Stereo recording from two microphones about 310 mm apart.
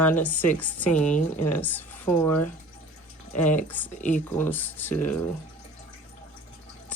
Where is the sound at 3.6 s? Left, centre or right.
Centre.